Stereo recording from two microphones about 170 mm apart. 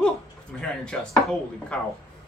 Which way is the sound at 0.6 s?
5° left (ahead or behind).